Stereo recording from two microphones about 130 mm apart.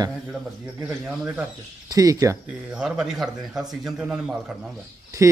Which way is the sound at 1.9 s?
25° right (ahead or behind).